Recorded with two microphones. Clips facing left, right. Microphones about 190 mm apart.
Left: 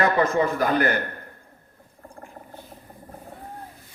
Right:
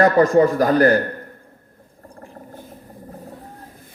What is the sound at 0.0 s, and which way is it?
A man's voice, 40° right (ahead or behind).